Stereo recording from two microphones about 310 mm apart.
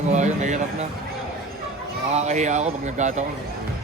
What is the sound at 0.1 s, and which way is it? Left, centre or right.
Speech, right.